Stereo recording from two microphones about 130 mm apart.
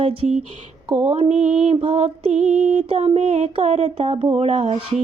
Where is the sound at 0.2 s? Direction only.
60° right (ahead or behind).